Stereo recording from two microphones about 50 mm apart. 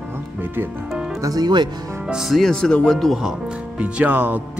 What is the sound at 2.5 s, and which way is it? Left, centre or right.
Speech, centre.